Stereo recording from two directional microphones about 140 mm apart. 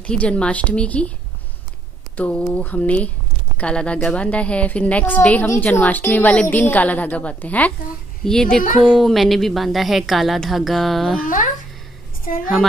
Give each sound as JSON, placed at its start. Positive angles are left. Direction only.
{"t": 0.0, "sound": "a woman's voice", "side_deg": 10}
{"t": 2.1, "sound": "a woman's voice", "side_deg": 10}
{"t": 11.2, "sound": "speech", "side_deg": 70}